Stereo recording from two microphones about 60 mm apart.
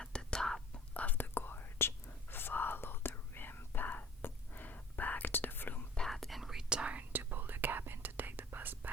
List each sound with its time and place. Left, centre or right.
0.0 s whispering: centre
0.9 s whispering: left
6.1 s whispering: centre
6.7 s whispering: centre
7.1 s whispering: right